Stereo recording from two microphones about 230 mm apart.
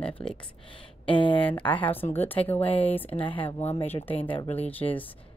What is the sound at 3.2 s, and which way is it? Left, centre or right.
Speech, left.